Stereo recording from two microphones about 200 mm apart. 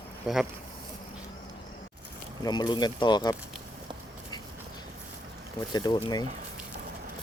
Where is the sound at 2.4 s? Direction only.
20° left (ahead or behind).